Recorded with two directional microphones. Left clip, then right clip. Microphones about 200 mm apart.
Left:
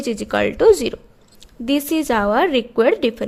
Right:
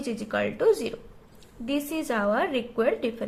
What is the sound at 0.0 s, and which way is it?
A woman's voice, 45° left (ahead or behind).